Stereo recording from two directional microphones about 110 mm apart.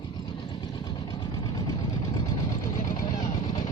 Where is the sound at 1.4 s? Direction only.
35° left (ahead or behind).